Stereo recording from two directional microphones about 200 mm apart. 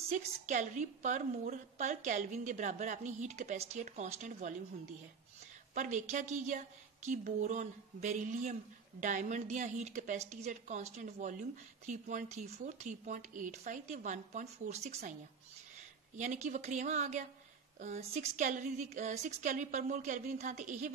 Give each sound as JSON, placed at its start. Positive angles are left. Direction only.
{"t": 0.1, "sound": "a woman's voice", "side_deg": -35}
{"t": 5.8, "sound": "a woman's voice", "side_deg": -35}
{"t": 16.2, "sound": "a woman's voice", "side_deg": -40}